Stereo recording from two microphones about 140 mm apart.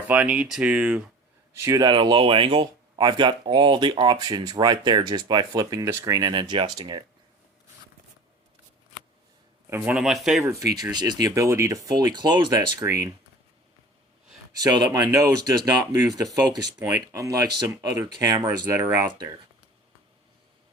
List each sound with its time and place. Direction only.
0.1 s speech: 10° right (ahead or behind)
1.6 s speech: 20° right (ahead or behind)
1.9 s speech: 35° right (ahead or behind)
9.6 s speech: 15° right (ahead or behind)
10.4 s speech: 20° right (ahead or behind)
14.6 s speech: 25° right (ahead or behind)